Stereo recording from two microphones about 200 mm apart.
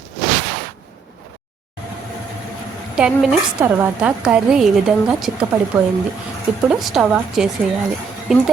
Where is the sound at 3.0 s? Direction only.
5° right (ahead or behind).